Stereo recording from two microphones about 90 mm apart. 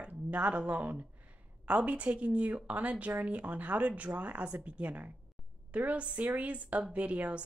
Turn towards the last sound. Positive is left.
turn(degrees=-15)  # may be behind; listen again after turning